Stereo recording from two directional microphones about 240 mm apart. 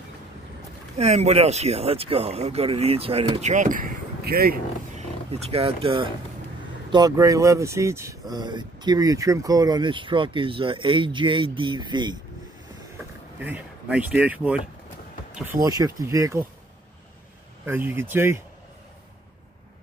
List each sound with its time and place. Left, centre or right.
0.9 s speech: right
5.3 s speech: right
12.9 s a sound: centre
15.3 s speech: centre
17.6 s speech: centre